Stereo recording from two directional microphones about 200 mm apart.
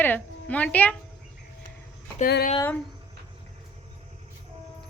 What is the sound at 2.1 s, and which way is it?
Speech, 45° left (ahead or behind).